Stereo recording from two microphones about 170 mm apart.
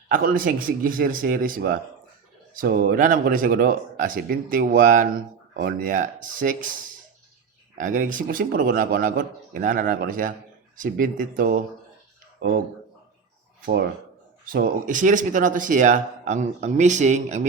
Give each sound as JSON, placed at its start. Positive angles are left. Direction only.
{"t": 0.1, "sound": "speech", "side_deg": -55}
{"t": 7.8, "sound": "speech", "side_deg": -50}
{"t": 13.7, "sound": "speech", "side_deg": -65}
{"t": 14.4, "sound": "speech", "side_deg": -55}